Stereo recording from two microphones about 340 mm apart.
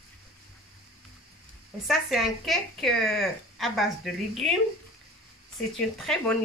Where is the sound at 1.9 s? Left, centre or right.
Centre.